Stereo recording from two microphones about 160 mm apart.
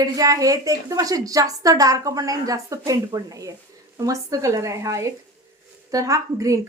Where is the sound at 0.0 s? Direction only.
20° right (ahead or behind).